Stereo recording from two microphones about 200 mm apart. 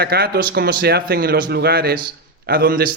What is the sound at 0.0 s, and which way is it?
A man's voice, 50° right (ahead or behind).